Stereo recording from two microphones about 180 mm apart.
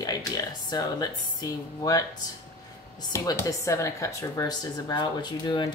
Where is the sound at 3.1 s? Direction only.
15° left (ahead or behind).